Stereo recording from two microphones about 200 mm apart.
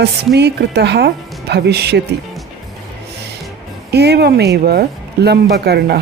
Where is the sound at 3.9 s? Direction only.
55° right (ahead or behind).